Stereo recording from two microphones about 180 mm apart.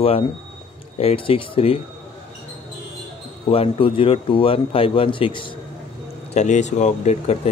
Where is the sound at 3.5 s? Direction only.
30° left (ahead or behind).